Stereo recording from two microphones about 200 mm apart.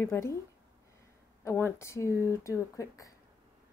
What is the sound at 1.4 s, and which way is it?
A woman's voice, 15° left (ahead or behind).